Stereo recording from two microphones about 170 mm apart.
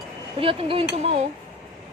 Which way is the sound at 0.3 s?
30° right (ahead or behind).